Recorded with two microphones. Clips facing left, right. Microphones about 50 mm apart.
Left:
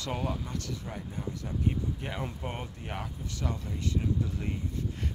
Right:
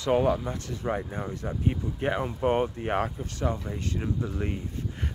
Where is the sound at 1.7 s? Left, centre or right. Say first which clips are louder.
Right 8 dB; right.